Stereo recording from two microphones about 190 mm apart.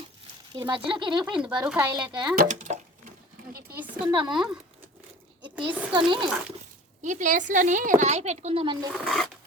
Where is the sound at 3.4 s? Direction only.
40° right (ahead or behind).